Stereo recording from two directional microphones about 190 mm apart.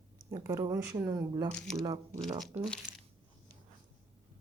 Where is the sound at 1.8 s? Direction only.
20° right (ahead or behind).